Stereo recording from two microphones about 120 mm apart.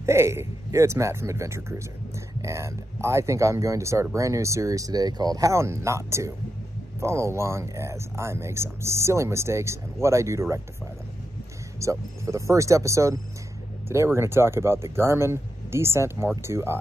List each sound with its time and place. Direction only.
0.0 s speech: 25° right (ahead or behind)
11.8 s speech: 25° right (ahead or behind)